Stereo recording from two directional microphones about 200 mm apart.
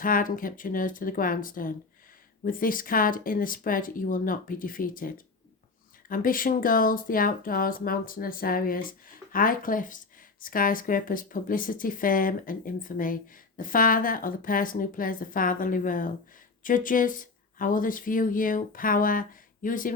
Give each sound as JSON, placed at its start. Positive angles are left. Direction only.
{"t": 0.0, "sound": "speech", "side_deg": 45}